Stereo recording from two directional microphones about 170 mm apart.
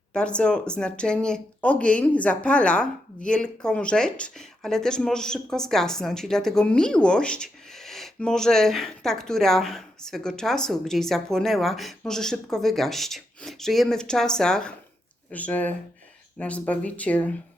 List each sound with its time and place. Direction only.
0.1 s speech: 5° left (ahead or behind)